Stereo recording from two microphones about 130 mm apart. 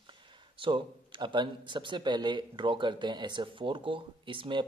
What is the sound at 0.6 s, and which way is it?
Speech, 40° right (ahead or behind).